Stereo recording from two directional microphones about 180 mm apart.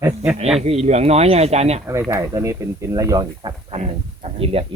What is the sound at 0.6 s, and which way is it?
Speech, 35° right (ahead or behind).